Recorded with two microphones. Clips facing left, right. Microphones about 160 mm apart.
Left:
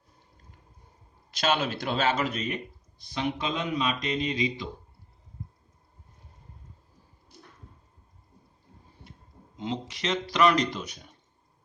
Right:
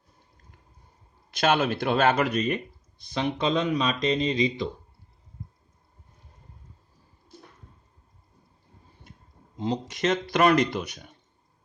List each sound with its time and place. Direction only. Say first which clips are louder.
1.3 s speech: right 4 dB; 55° right (ahead or behind)
3.2 s speech: right 5 dB; 80° right
9.6 s speech: right 5 dB; 35° right (ahead or behind); by 10.9 s 60° right (ahead or behind)